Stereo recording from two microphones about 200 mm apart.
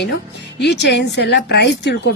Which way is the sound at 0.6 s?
60° left (ahead or behind).